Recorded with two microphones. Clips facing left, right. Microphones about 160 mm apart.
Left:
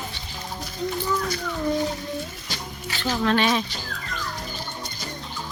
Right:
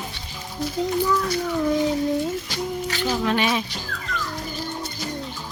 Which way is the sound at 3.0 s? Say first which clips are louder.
Left 1 dB; 10° right (ahead or behind).